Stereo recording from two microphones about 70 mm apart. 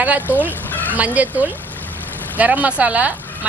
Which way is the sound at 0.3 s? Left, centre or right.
Right.